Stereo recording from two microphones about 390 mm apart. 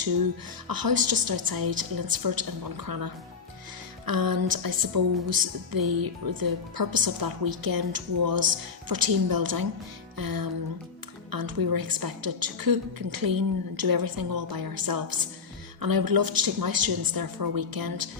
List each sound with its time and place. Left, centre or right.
0.7 s a woman's voice: right